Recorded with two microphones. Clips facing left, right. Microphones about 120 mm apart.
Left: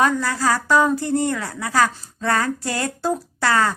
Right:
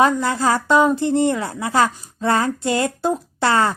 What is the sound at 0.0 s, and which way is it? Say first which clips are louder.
A woman's voice: right 3 dB; 25° right (ahead or behind).